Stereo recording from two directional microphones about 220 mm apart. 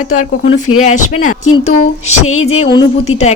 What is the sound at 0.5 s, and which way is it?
Speech, 75° left (ahead or behind).